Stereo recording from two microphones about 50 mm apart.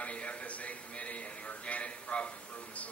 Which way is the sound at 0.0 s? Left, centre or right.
Left.